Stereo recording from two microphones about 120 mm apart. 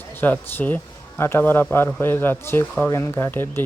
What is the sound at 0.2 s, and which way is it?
Speech, 15° left (ahead or behind).